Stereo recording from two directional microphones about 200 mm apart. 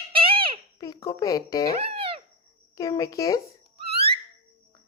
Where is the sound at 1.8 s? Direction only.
25° right (ahead or behind).